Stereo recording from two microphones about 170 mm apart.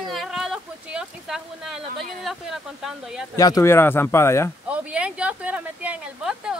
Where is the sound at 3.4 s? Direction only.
20° left (ahead or behind).